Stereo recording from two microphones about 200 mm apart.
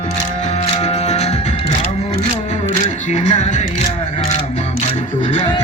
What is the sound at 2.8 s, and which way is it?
Single-lens reflex camera, 35° left (ahead or behind).